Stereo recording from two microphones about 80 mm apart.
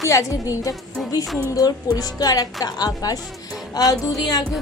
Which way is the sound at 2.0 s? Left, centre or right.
Left.